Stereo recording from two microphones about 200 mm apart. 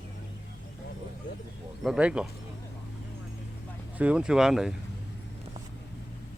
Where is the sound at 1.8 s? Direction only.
5° right (ahead or behind).